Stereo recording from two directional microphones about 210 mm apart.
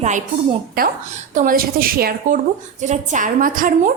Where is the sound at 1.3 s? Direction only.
40° right (ahead or behind).